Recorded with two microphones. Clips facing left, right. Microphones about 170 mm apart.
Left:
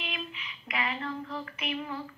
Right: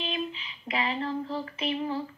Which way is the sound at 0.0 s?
30° right (ahead or behind).